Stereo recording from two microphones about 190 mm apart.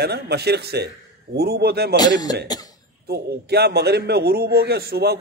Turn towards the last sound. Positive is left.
turn(degrees=-55)  # may be behind; listen again after turning